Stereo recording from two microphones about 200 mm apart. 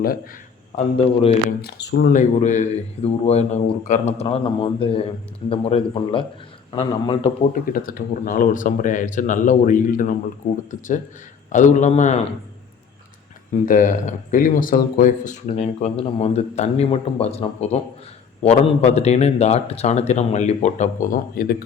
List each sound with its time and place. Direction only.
1.5 s speech: 55° left (ahead or behind)
2.4 s speech: 35° left (ahead or behind)
7.5 s a man's voice: 45° left (ahead or behind)
13.5 s a man's voice: 40° left (ahead or behind)